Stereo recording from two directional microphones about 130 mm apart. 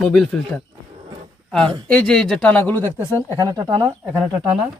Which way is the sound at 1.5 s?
5° left (ahead or behind).